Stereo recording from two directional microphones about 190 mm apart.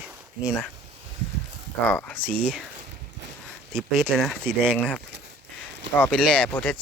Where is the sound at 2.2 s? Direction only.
5° right (ahead or behind).